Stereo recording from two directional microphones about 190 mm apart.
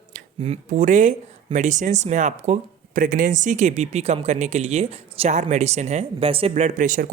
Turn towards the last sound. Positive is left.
turn(degrees=-45)  # may be behind; listen again after turning